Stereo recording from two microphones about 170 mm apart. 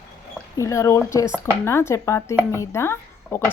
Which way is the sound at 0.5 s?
20° left (ahead or behind).